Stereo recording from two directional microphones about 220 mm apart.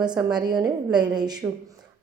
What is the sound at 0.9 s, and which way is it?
Speech, 20° right (ahead or behind).